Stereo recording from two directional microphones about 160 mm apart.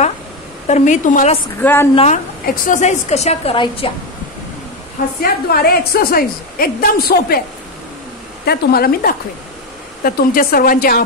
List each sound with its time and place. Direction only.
0.7 s a woman's voice: 45° left (ahead or behind)
1.6 s a woman's voice: 15° left (ahead or behind)
2.4 s a woman's voice: 55° left (ahead or behind)
3.5 s a woman's voice: 30° left (ahead or behind)
5.2 s a woman's voice: 70° left (ahead or behind)
8.5 s a woman's voice: 70° left (ahead or behind)